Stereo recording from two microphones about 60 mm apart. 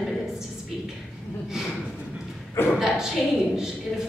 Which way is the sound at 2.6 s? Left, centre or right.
Left.